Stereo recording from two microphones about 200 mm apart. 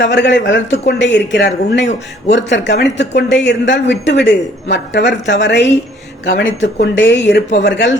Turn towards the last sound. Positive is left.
turn(degrees=60)  # may be behind; listen again after turning